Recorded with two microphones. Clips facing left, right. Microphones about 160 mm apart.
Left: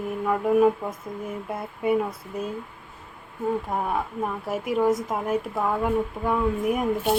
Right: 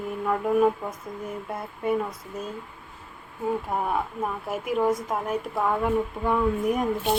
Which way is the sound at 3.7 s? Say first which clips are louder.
Even; centre (ahead or behind).